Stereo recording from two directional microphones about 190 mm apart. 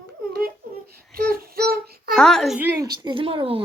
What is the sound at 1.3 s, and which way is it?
Child singing, 55° right (ahead or behind).